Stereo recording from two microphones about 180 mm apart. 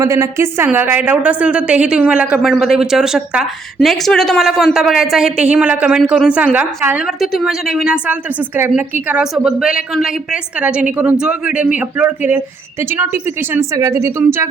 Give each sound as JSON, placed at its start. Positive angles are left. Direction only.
{"t": 0.0, "sound": "a woman's voice", "side_deg": -15}
{"t": 13.5, "sound": "speech", "side_deg": -15}